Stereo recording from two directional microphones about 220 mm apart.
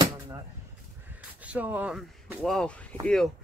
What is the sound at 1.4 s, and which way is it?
Speech, 5° right (ahead or behind).